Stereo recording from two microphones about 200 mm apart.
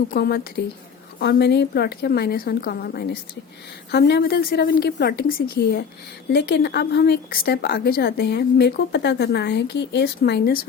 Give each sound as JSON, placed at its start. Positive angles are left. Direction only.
{"t": 0.1, "sound": "a woman's voice", "side_deg": 50}
{"t": 6.3, "sound": "speech", "side_deg": 55}